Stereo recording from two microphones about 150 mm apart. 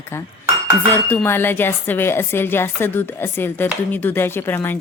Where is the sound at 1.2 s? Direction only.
15° left (ahead or behind).